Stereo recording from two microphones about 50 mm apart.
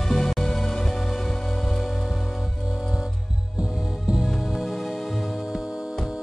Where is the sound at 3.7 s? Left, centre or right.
Centre.